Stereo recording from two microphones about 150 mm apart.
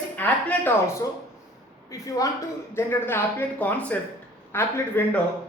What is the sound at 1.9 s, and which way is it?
A woman's voice, 20° left (ahead or behind).